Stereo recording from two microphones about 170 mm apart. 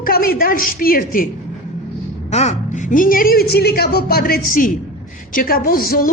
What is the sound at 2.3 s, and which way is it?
A man's voice, 40° left (ahead or behind).